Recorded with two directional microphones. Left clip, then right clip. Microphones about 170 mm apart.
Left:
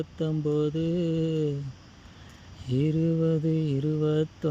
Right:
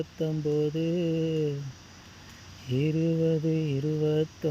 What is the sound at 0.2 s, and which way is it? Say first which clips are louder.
Speech: left 1 dB; 25° left (ahead or behind).